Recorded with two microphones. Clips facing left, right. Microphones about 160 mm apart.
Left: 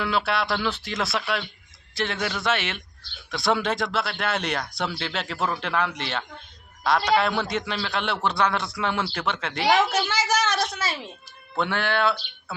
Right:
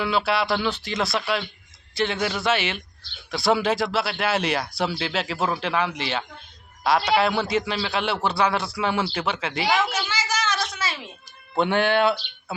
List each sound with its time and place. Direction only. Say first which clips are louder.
0.0 s a man's voice: right 2 dB; centre (ahead or behind)
10.1 s a sound: left 3 dB; 65° left (ahead or behind)
11.5 s speech: right 5 dB; 15° right (ahead or behind)